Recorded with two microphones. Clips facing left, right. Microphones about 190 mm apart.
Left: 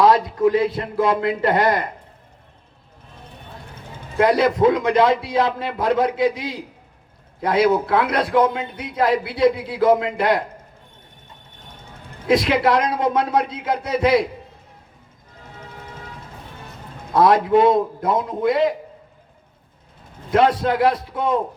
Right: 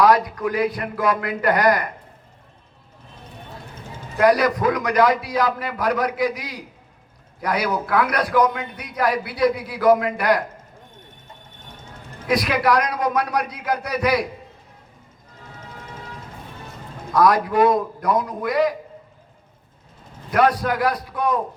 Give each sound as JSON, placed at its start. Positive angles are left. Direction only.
{"t": 0.0, "sound": "a man's voice", "side_deg": 25}
{"t": 4.2, "sound": "a man's voice", "side_deg": 25}
{"t": 12.3, "sound": "a man's voice", "side_deg": 25}
{"t": 17.1, "sound": "a man's voice", "side_deg": 25}
{"t": 20.3, "sound": "a man's voice", "side_deg": 25}